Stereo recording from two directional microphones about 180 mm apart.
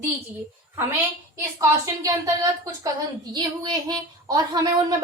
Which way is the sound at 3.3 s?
20° right (ahead or behind).